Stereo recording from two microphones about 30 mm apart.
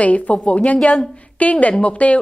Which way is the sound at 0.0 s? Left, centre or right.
Left.